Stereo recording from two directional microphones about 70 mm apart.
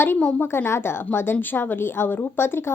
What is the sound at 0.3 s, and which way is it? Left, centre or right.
A woman's voice, left.